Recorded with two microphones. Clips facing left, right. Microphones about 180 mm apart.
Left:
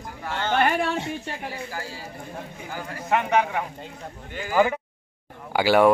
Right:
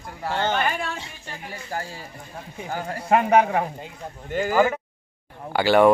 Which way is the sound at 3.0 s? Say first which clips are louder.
Right 4 dB; 35° right (ahead or behind).